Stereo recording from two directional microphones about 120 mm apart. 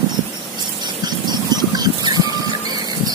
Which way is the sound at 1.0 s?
35° right (ahead or behind).